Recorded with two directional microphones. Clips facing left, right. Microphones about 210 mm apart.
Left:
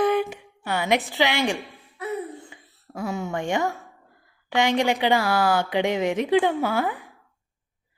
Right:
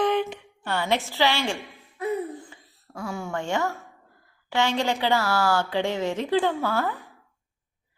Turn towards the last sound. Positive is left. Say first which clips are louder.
# left 2 dB
turn(degrees=15)  # may be behind; listen again after turning